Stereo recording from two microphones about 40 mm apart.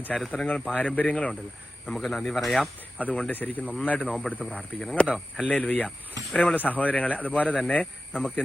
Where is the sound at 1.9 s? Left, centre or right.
Centre.